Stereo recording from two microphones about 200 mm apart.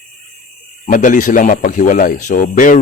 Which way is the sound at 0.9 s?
45° left (ahead or behind).